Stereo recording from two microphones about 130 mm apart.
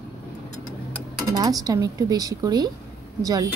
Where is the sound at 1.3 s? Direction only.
30° right (ahead or behind).